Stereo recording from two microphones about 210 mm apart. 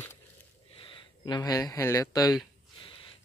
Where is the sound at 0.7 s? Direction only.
25° left (ahead or behind).